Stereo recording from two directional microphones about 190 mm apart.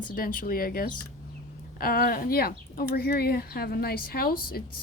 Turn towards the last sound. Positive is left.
turn(degrees=50)  # may be behind; listen again after turning